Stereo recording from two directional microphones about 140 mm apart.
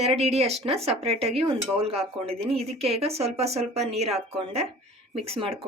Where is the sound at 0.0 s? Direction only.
50° right (ahead or behind).